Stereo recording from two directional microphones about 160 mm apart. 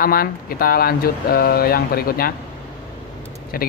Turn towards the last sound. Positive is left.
turn(degrees=65)  # may be behind; listen again after turning